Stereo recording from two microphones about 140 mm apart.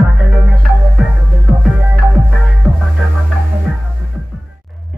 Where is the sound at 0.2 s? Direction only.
5° right (ahead or behind).